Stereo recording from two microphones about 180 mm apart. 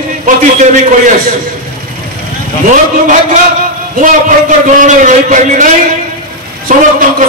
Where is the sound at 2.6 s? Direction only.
45° right (ahead or behind).